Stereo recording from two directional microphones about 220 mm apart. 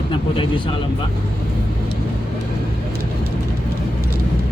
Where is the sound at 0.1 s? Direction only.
20° left (ahead or behind).